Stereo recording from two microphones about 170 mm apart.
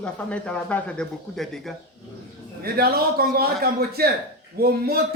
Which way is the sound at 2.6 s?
60° right (ahead or behind).